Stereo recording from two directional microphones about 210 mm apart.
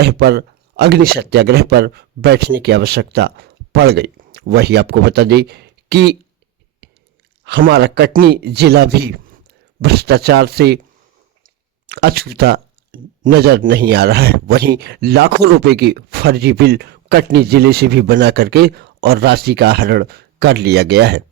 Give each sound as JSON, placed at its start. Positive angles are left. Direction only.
{"t": 0.0, "sound": "speech", "side_deg": -50}
{"t": 7.4, "sound": "speech", "side_deg": -50}